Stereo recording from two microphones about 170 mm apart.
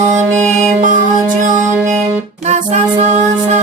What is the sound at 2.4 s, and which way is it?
Music, 40° right (ahead or behind).